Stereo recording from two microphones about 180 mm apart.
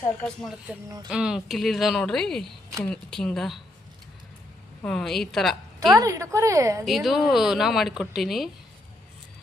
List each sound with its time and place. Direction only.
0.2 s speech: 5° left (ahead or behind)
4.8 s speech: 5° left (ahead or behind)
5.9 s a woman's voice: 20° right (ahead or behind)
6.8 s speech: centre (ahead or behind)